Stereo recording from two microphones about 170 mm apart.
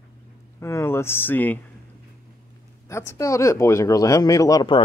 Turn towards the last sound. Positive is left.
turn(degrees=20)  # may be behind; listen again after turning